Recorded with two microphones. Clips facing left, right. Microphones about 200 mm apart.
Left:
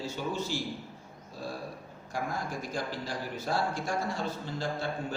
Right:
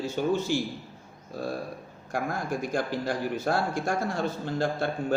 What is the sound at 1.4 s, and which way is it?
Speech, 55° right (ahead or behind).